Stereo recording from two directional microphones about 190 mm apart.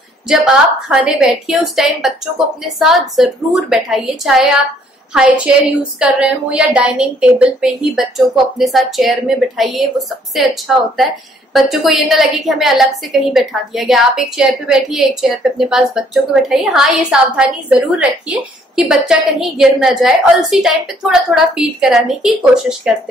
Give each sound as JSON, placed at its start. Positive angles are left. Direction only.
{"t": 0.3, "sound": "a woman's voice", "side_deg": -5}